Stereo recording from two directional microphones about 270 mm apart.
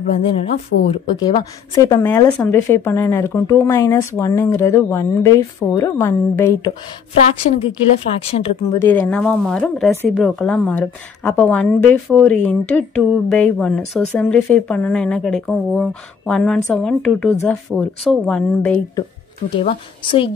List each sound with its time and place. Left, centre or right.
0.0 s speech: left
8.6 s speech: centre
19.5 s speech: centre